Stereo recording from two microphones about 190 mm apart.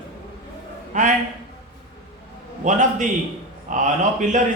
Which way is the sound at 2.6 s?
40° right (ahead or behind).